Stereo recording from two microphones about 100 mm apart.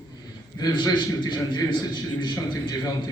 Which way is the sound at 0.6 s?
45° left (ahead or behind).